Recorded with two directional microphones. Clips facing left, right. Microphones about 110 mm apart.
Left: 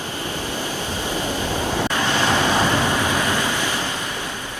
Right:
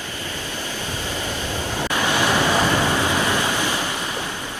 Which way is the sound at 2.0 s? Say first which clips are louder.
Right 3 dB; 15° right (ahead or behind).